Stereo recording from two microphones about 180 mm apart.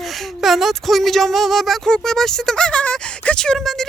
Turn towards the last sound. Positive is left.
turn(degrees=0)  # may be behind; listen again after turning